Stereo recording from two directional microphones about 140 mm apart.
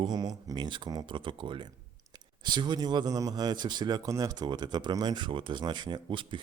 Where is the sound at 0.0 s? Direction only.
30° right (ahead or behind).